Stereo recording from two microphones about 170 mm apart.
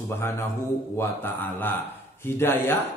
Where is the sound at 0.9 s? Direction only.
10° left (ahead or behind).